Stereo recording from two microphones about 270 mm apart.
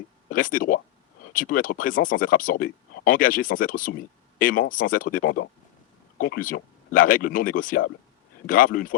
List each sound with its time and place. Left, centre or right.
0.3 s speech: left